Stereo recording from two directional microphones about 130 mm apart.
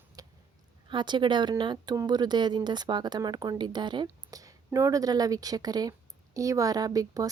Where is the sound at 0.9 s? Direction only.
35° right (ahead or behind).